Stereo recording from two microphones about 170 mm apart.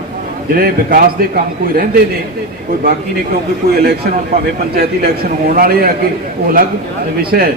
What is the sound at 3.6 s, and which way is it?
A man's voice, 65° right (ahead or behind).